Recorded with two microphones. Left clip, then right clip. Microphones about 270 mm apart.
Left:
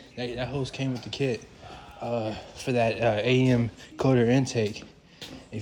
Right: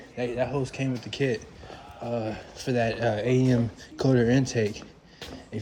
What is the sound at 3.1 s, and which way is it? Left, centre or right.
Speech, left.